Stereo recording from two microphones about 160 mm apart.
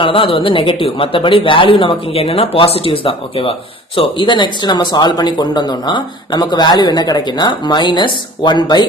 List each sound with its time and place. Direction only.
0.0 s speech: 35° left (ahead or behind)